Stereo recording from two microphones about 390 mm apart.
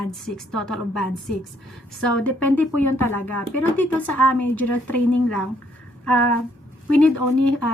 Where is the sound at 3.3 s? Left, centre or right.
Left.